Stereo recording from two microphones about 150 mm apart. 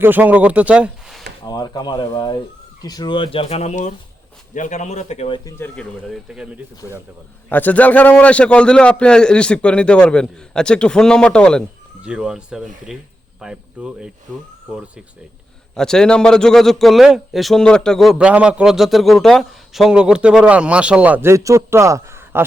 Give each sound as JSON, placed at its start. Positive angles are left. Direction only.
{"t": 0.0, "sound": "speech", "side_deg": -10}
{"t": 1.5, "sound": "speech", "side_deg": 25}
{"t": 5.5, "sound": "a man's voice", "side_deg": 10}
{"t": 6.8, "sound": "a man's voice", "side_deg": 20}
{"t": 12.0, "sound": "a man's voice", "side_deg": -5}
{"t": 15.7, "sound": "a man's voice", "side_deg": 5}